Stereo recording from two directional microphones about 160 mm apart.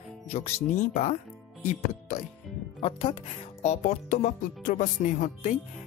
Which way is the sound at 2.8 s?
40° left (ahead or behind).